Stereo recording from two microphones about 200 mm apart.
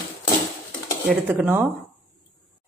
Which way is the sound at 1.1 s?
10° right (ahead or behind).